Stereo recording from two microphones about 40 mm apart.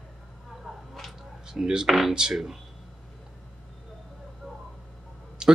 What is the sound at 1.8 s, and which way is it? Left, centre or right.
Speech, centre.